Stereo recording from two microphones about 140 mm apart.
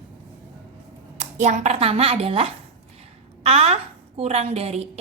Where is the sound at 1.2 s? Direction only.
55° right (ahead or behind).